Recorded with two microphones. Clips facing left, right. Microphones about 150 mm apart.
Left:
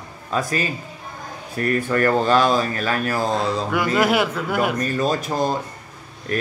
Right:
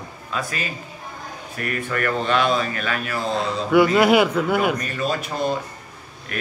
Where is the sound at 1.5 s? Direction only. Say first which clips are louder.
Left 6 dB; 35° left (ahead or behind).